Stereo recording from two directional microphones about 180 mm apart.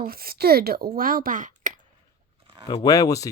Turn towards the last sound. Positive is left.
turn(degrees=20)  # may be behind; listen again after turning